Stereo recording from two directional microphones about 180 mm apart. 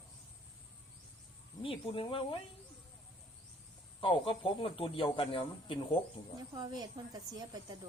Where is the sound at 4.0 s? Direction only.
30° left (ahead or behind).